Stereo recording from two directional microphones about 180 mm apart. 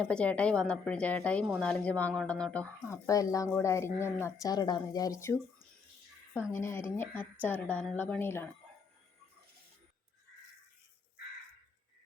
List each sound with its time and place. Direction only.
0.0 s a woman's voice: 5° left (ahead or behind)
2.9 s a woman's voice: 20° left (ahead or behind)
6.5 s a woman's voice: 15° left (ahead or behind)